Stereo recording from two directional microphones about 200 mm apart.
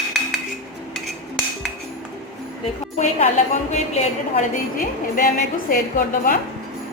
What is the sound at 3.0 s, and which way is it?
A woman's voice, 35° left (ahead or behind).